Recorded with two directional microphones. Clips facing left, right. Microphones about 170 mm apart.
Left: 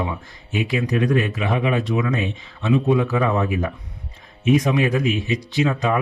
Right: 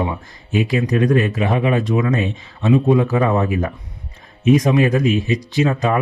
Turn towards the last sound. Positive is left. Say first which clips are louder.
# right 3 dB
turn(degrees=-45)  # may be behind; listen again after turning